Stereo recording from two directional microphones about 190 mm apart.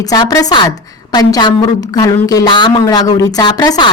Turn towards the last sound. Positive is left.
turn(degrees=20)  # may be behind; listen again after turning